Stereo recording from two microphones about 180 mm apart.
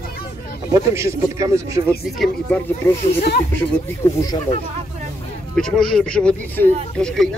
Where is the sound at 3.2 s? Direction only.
60° left (ahead or behind).